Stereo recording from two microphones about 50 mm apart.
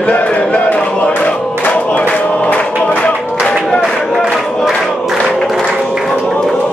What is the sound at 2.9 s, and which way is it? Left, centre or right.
Music, left.